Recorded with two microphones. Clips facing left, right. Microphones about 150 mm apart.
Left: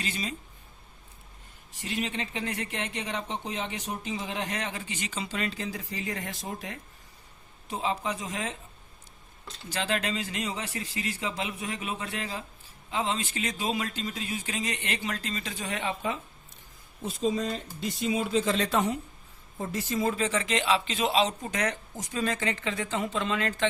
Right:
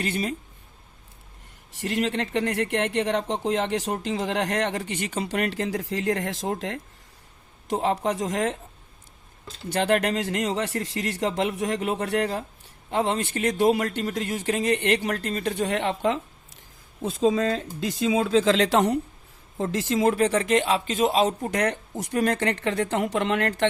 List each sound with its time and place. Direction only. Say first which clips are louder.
0.0 s speech: right 7 dB; 60° right (ahead or behind)
1.7 s speech: right 7 dB; 80° right
9.6 s speech: right 8 dB; 60° right (ahead or behind)